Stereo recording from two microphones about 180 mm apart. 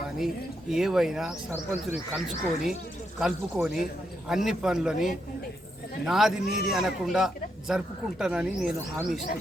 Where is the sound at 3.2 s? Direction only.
Centre (ahead or behind).